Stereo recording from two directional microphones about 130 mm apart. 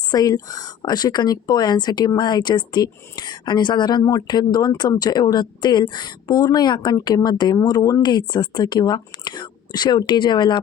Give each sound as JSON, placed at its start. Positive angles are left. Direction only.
{"t": 0.1, "sound": "speech", "side_deg": 30}